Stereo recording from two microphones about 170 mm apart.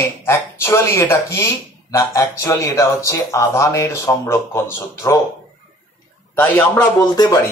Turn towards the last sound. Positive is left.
turn(degrees=25)  # may be behind; listen again after turning